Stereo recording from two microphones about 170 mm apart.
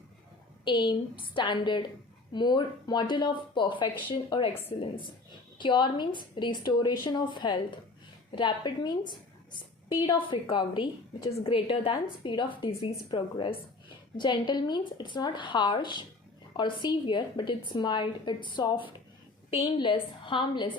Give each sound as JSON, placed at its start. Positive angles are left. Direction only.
{"t": 0.6, "sound": "a woman's voice", "side_deg": 25}
{"t": 5.5, "sound": "a woman's voice", "side_deg": 25}